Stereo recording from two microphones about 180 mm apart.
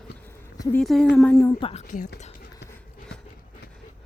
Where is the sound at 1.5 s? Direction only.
30° left (ahead or behind).